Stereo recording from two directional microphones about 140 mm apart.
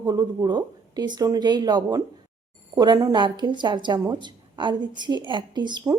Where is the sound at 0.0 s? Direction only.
25° right (ahead or behind).